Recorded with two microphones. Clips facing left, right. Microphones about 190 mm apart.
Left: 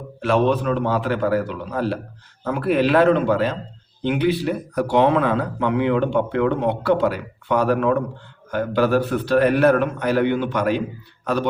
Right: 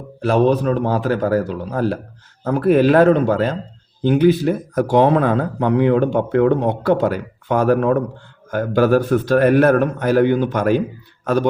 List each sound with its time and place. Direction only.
0.2 s a man's voice: 40° right (ahead or behind)